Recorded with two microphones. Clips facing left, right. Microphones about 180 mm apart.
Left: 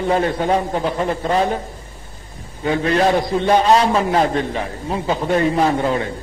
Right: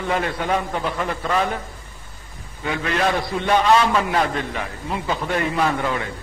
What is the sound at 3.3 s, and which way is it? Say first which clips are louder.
A man's voice: left 1 dB; 35° left (ahead or behind).